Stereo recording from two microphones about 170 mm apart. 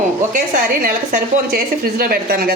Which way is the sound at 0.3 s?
50° right (ahead or behind).